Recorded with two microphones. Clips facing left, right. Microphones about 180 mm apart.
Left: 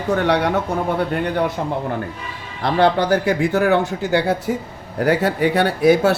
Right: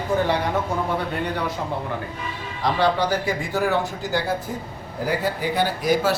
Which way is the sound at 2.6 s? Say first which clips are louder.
Left 4 dB; 60° left (ahead or behind).